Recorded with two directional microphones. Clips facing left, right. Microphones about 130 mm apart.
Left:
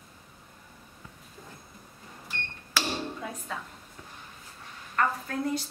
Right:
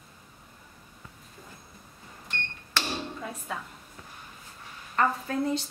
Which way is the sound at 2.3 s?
5° left (ahead or behind).